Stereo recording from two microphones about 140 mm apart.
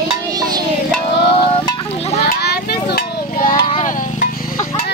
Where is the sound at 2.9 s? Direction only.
80° left.